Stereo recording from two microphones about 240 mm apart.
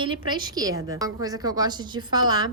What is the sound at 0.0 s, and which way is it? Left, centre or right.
A woman's voice, centre.